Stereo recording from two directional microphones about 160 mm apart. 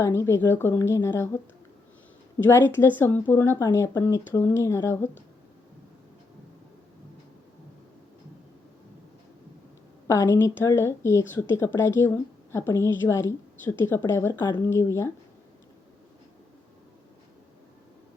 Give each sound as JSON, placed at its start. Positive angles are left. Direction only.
{"t": 0.0, "sound": "speech", "side_deg": 15}
{"t": 2.5, "sound": "speech", "side_deg": 15}
{"t": 10.1, "sound": "speech", "side_deg": 15}